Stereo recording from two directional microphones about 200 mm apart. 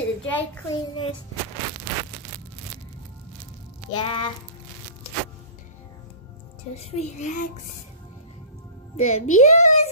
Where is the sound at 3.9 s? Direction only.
25° left (ahead or behind).